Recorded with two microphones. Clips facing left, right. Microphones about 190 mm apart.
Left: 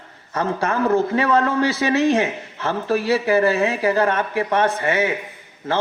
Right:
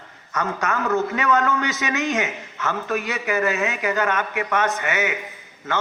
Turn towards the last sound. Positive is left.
turn(degrees=30)  # may be behind; listen again after turning